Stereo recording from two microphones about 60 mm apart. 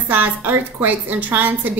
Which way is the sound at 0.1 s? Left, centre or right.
Right.